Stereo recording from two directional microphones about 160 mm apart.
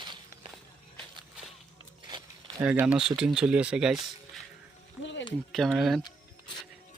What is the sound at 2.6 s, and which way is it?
Speech, 10° right (ahead or behind).